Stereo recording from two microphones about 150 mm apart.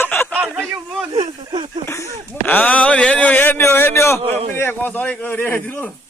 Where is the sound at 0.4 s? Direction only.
5° left (ahead or behind).